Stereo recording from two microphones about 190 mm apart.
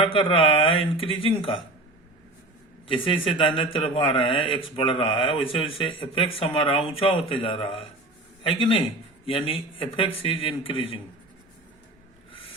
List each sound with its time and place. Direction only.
0.0 s a man's voice: 25° left (ahead or behind)
2.8 s a man's voice: 25° left (ahead or behind)